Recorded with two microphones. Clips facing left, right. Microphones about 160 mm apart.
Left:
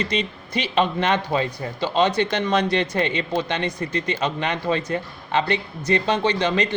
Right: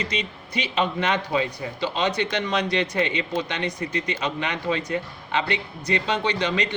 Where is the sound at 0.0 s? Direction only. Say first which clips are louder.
Left 4 dB; 10° right (ahead or behind).